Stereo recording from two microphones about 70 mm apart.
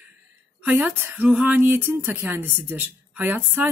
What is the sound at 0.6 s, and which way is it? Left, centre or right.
A woman's voice, right.